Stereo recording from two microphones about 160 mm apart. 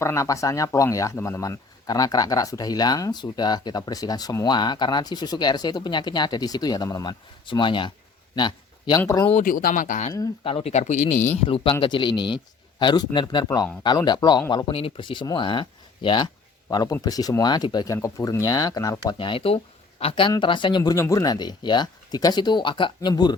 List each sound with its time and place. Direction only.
0.0 s speech: 20° left (ahead or behind)
8.4 s a sound: 30° left (ahead or behind)
9.0 s speech: 20° left (ahead or behind)
9.4 s speech: 60° left (ahead or behind)
10.4 s speech: 35° left (ahead or behind)
11.4 s speech: 35° left (ahead or behind)
19.2 s speech: 35° left (ahead or behind)